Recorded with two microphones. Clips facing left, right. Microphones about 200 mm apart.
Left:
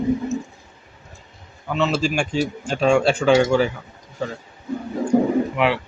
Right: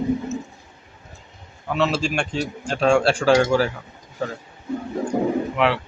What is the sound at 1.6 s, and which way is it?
Speech, centre (ahead or behind).